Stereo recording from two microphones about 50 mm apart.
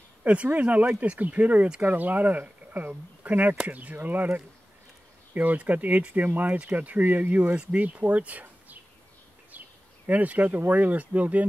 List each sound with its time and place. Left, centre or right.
0.2 s speech: right
10.0 s speech: right